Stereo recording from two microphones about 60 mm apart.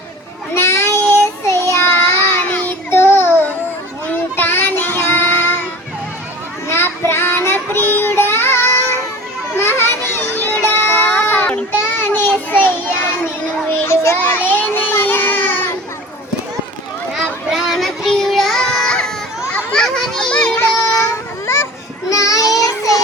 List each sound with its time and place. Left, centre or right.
0.5 s child singing: left
7.1 s child singing: left
9.6 s children playing: left
10.4 s a sound: left
11.3 s child singing: left
11.8 s child singing: left
13.8 s children playing: left
14.3 s child singing: left
17.2 s child singing: centre
19.7 s children playing: centre
20.4 s child singing: left
20.7 s a sound: left
22.1 s child singing: left